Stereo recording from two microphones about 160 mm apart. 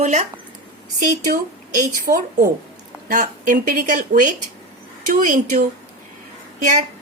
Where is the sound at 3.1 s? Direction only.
55° right (ahead or behind).